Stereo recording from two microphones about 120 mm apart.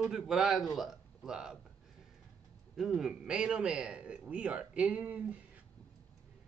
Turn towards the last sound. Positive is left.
turn(degrees=-10)  # may be behind; listen again after turning